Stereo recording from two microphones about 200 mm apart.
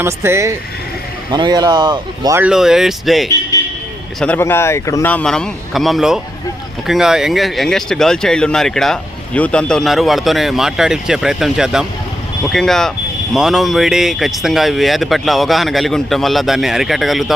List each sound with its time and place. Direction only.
0.0 s speech: 15° right (ahead or behind)
2.4 s speech: 5° right (ahead or behind)